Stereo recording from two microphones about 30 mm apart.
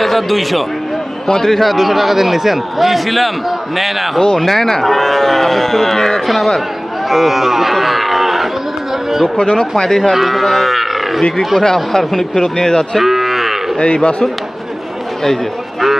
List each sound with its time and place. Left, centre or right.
0.0 s a man's voice: centre
1.7 s a man's voice: centre
6.2 s a man's voice: centre
7.7 s cattle: centre
9.4 s speech: left
10.0 s a man's voice: centre
10.4 s livestock: centre
11.6 s speech: centre
13.0 s moo: centre
13.7 s speech: left